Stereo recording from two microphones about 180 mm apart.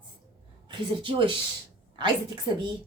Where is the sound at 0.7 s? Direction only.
25° right (ahead or behind).